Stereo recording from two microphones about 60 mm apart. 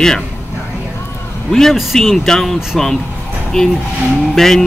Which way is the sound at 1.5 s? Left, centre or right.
Centre.